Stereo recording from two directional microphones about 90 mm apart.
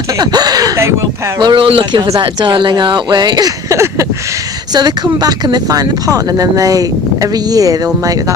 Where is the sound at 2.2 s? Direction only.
60° right (ahead or behind); by 4.0 s 35° right (ahead or behind).